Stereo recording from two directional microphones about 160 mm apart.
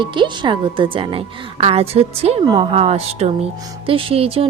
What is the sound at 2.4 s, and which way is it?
A woman's voice, 30° right (ahead or behind).